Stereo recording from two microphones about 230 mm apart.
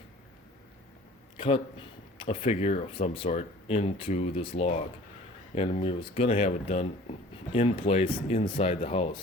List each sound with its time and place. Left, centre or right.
1.4 s a man's voice: left